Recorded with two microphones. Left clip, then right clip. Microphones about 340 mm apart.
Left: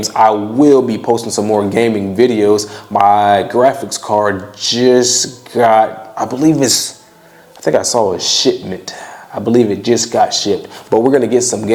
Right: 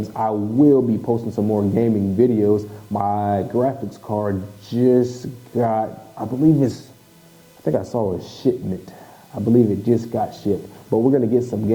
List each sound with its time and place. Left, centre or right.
0.0 s speech: centre
8.2 s speech: centre
10.8 s speech: centre
11.2 s speech: centre